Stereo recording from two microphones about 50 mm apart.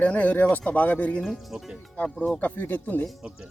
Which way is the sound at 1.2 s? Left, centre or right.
Centre.